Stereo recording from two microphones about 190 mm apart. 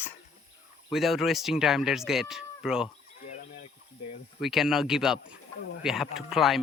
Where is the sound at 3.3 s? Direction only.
45° left (ahead or behind).